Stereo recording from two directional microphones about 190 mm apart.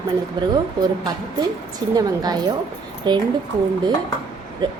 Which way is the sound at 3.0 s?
25° right (ahead or behind).